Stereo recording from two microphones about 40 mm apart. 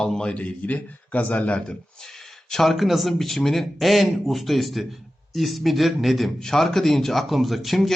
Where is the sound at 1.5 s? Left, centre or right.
Left.